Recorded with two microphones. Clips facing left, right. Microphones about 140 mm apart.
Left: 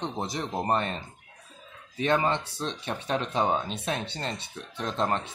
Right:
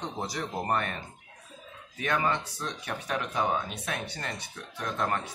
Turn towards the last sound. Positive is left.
turn(degrees=25)  # may be behind; listen again after turning